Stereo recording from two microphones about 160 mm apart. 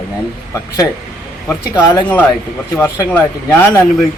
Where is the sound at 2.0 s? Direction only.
10° left (ahead or behind).